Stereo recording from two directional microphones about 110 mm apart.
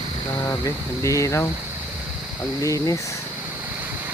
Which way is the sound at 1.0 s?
30° left (ahead or behind).